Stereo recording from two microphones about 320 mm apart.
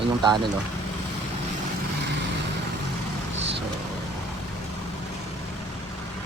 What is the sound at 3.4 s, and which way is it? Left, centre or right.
Vehicle, right.